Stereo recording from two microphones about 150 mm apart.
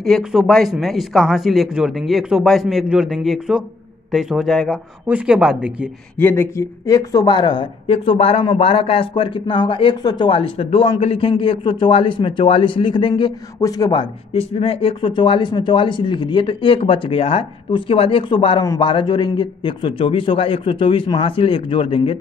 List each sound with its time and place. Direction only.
0.0 s speech: centre (ahead or behind)
6.1 s speech: 15° left (ahead or behind); by 13.1 s 35° left (ahead or behind)
13.1 s speech: 25° left (ahead or behind)
14.3 s speech: 40° left (ahead or behind)